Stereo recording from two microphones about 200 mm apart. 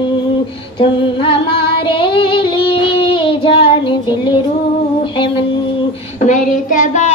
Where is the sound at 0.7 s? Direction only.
25° left (ahead or behind).